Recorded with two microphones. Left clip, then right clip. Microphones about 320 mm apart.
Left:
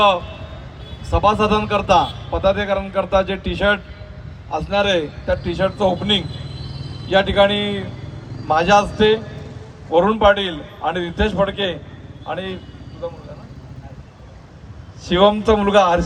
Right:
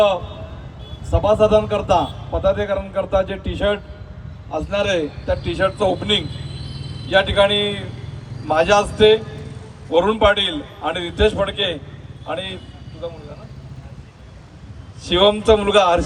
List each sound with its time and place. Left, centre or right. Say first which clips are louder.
1.1 s a man's voice: right 2 dB; centre
7.1 s a man's voice: even; left
15.0 s a man's voice: even; left